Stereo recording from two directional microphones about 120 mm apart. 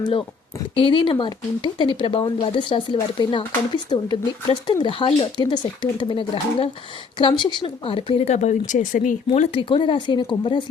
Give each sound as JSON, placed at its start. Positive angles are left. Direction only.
{"t": 0.8, "sound": "speech", "side_deg": 45}
{"t": 8.3, "sound": "speech", "side_deg": 75}
{"t": 9.5, "sound": "speech", "side_deg": 45}